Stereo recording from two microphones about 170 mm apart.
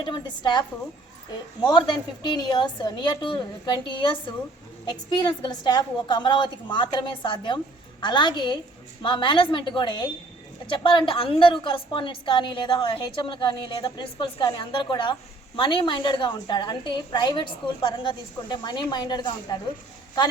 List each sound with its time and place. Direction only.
0.0 s a woman's voice: 25° left (ahead or behind)
2.2 s a woman's voice: 25° left (ahead or behind)